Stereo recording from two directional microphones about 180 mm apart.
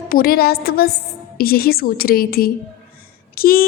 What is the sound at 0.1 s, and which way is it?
A woman's voice, 55° left (ahead or behind).